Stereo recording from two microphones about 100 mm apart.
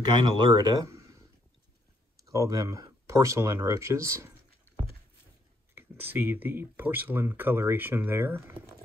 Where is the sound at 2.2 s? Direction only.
35° right (ahead or behind).